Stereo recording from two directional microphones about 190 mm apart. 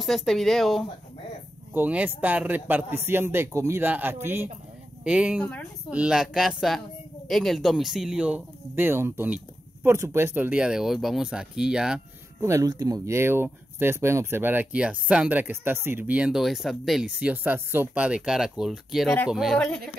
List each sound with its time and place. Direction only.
0.0 s speech: centre (ahead or behind)
1.7 s speech: 10° right (ahead or behind)
5.4 s speech: 5° left (ahead or behind)
5.9 s speech: 5° right (ahead or behind)
12.4 s speech: 15° right (ahead or behind); by 19.8 s centre (ahead or behind)